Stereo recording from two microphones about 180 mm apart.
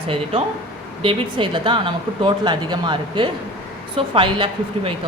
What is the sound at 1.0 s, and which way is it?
Speech, 30° right (ahead or behind).